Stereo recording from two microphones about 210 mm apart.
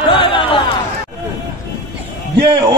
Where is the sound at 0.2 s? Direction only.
25° left (ahead or behind).